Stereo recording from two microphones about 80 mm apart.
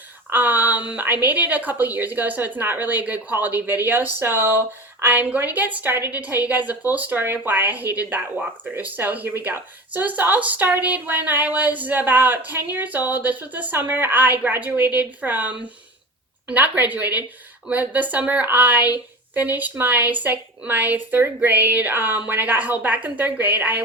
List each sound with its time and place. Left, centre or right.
0.3 s a woman's voice: right